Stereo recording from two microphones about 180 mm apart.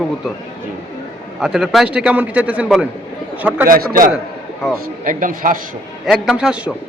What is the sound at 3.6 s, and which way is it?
Speech, 50° right (ahead or behind).